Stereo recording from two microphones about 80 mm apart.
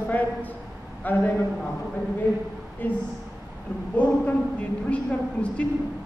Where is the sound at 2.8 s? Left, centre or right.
Left.